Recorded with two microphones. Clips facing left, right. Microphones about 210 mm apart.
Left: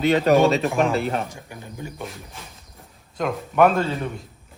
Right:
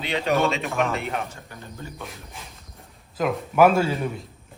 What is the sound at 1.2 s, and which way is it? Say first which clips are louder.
Speech: left 2 dB; 15° left (ahead or behind).